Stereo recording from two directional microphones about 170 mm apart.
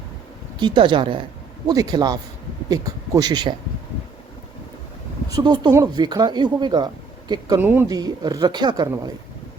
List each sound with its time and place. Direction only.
0.6 s speech: 25° right (ahead or behind)
5.3 s speech: 25° right (ahead or behind)
7.6 s speech: 10° right (ahead or behind)